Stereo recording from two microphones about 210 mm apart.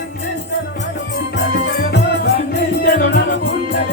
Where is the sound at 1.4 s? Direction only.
50° left (ahead or behind).